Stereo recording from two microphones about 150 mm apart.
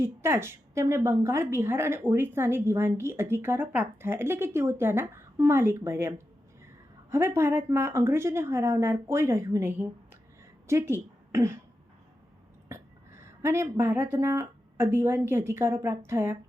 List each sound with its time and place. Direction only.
0.0 s a woman's voice: 15° right (ahead or behind)
12.6 s a woman's voice: 20° right (ahead or behind)